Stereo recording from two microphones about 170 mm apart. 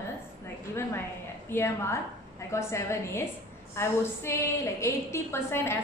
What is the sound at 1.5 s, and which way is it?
A woman's voice, 15° left (ahead or behind).